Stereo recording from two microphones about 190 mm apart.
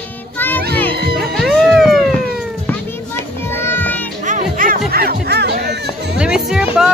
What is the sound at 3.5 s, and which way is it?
Music, 10° left (ahead or behind).